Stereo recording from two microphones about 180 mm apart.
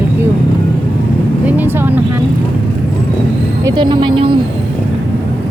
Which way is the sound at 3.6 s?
25° right (ahead or behind).